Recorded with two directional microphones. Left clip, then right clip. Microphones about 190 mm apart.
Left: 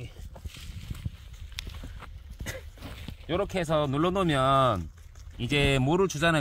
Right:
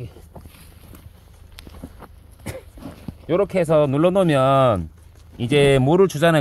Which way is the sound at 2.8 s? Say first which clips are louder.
Right 6 dB; 10° left (ahead or behind).